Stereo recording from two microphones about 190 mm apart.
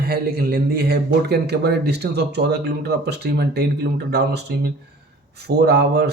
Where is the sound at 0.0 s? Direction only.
55° right (ahead or behind).